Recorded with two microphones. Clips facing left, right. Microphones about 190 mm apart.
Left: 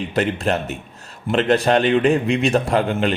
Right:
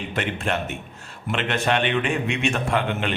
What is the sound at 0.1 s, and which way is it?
Speech, 35° left (ahead or behind).